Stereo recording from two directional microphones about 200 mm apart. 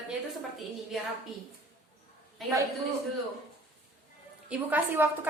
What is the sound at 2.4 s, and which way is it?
Speech, centre (ahead or behind).